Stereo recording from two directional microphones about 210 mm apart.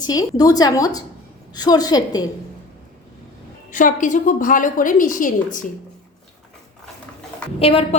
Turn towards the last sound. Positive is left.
turn(degrees=30)  # may be behind; listen again after turning